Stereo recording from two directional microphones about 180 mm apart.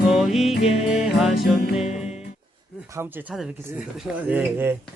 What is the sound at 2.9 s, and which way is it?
Speech, 10° right (ahead or behind).